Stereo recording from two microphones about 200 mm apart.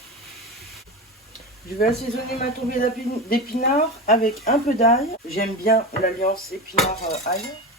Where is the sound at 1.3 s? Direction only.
45° left (ahead or behind).